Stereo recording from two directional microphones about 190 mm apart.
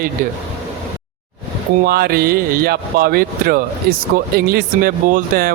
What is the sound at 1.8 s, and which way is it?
Speech, 55° right (ahead or behind).